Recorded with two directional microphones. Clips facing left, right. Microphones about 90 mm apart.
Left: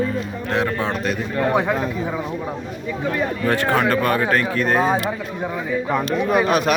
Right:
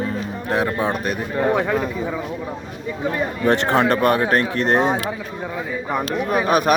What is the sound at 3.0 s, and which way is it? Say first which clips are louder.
Speech: right 1 dB; 15° right (ahead or behind).